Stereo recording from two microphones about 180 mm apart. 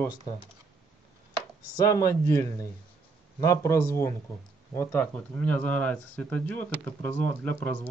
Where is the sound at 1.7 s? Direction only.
20° left (ahead or behind).